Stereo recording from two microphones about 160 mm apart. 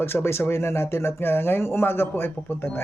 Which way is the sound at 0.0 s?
15° left (ahead or behind).